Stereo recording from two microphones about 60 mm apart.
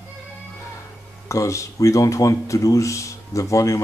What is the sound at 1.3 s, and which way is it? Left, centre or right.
Speech, left.